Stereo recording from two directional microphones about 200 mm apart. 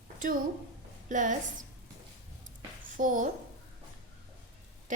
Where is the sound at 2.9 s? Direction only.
40° right (ahead or behind).